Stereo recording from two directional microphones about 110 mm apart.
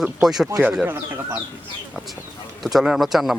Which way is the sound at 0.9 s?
20° right (ahead or behind).